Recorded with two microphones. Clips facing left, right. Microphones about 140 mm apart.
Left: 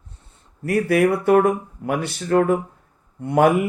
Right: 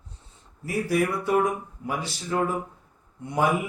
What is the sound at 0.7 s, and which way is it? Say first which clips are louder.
Speech: left 7 dB; 70° left (ahead or behind).